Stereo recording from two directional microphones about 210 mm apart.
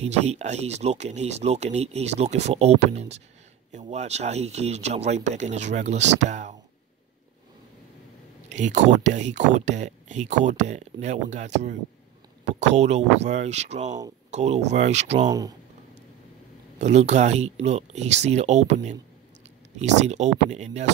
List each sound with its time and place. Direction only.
0.0 s speech: 30° right (ahead or behind)
8.5 s speech: 35° right (ahead or behind)
15.2 s speech: 15° right (ahead or behind)
16.7 s speech: 30° right (ahead or behind)